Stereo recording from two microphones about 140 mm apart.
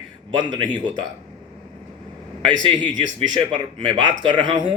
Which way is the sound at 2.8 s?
30° right (ahead or behind).